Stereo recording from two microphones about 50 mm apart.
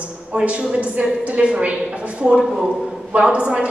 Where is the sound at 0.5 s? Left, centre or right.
Right.